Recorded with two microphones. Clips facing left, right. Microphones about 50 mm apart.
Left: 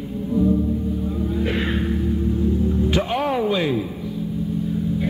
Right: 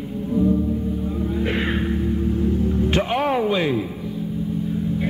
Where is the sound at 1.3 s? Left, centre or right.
Right.